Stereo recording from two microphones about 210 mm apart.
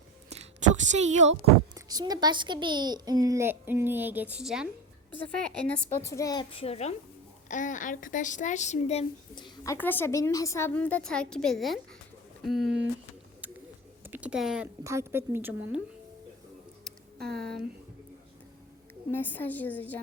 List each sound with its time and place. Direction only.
0.3 s a sound: 35° right (ahead or behind)
1.7 s a woman's voice: 20° right (ahead or behind); by 9.7 s 20° left (ahead or behind)
9.7 s a woman's voice: 10° left (ahead or behind)
14.0 s a sound: 10° right (ahead or behind)
14.8 s a woman's voice: 10° right (ahead or behind)
17.2 s speech: centre (ahead or behind)
19.1 s a woman's voice: 10° left (ahead or behind)